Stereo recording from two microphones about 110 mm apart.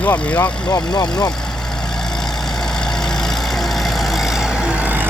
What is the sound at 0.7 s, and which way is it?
Speech, 35° left (ahead or behind).